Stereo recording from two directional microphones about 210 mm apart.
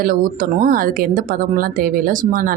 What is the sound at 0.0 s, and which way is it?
Speech, 40° right (ahead or behind).